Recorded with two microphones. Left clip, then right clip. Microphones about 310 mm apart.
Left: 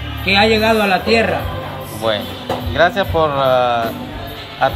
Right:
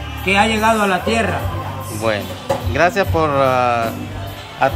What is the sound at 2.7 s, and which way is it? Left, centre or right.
Speech, centre.